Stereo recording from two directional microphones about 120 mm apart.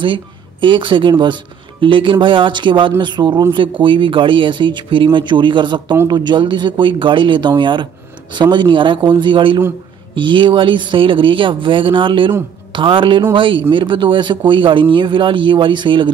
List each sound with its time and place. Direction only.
0.0 s a man's voice: 45° right (ahead or behind)